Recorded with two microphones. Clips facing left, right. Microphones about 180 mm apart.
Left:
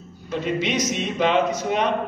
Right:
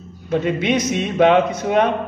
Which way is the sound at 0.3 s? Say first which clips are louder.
Right 5 dB; 55° right (ahead or behind).